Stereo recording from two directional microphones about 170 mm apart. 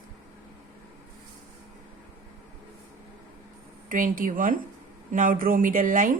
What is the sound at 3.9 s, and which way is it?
A woman's voice, 55° right (ahead or behind).